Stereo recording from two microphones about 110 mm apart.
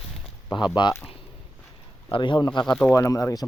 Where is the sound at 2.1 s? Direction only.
45° left (ahead or behind).